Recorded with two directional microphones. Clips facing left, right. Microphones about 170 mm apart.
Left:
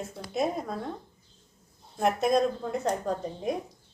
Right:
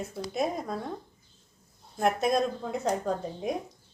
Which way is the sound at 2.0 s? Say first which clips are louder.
Left 1 dB; centre (ahead or behind).